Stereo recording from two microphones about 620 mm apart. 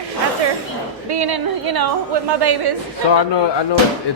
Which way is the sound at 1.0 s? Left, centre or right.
Right.